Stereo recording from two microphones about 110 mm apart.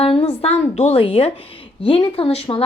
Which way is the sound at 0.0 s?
60° left (ahead or behind).